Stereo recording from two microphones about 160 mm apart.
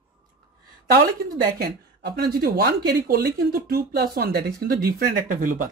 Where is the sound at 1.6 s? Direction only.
75° right (ahead or behind).